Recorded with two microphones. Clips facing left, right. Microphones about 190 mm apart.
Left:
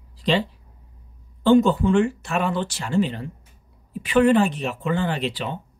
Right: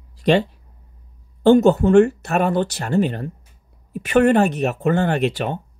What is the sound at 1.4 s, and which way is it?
Speech, 45° right (ahead or behind).